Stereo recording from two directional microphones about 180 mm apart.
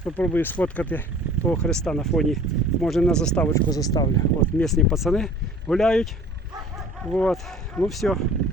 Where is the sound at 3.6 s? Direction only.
20° left (ahead or behind).